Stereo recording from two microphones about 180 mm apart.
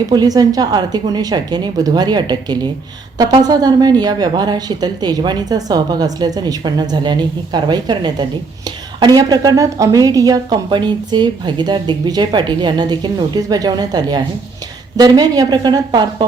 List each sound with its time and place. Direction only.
0.1 s a woman's voice: 20° right (ahead or behind)